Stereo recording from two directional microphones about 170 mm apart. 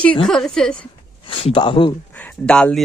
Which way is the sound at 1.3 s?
30° left (ahead or behind).